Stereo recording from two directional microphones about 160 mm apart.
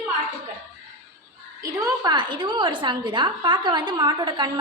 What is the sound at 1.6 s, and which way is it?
A woman's voice, 20° right (ahead or behind).